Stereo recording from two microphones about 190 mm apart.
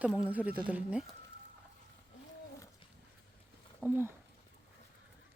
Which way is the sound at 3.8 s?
10° right (ahead or behind).